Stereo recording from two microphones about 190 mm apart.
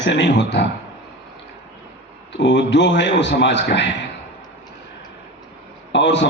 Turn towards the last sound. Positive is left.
turn(degrees=70)  # may be behind; listen again after turning